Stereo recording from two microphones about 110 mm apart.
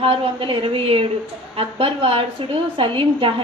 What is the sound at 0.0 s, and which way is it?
A woman's voice, 55° right (ahead or behind).